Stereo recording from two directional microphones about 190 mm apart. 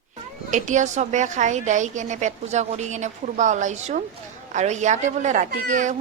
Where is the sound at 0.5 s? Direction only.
40° right (ahead or behind).